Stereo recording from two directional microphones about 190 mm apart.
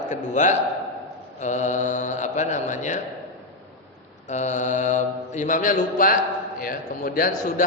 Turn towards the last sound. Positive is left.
turn(degrees=50)  # may be behind; listen again after turning